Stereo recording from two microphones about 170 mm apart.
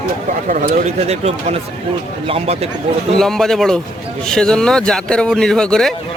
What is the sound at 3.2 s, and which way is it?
Speech, centre (ahead or behind).